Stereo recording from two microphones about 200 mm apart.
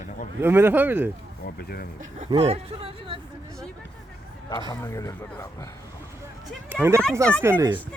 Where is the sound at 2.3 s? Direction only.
30° right (ahead or behind).